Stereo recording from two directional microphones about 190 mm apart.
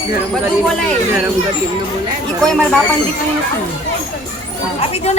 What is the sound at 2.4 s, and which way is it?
Speech, 5° left (ahead or behind).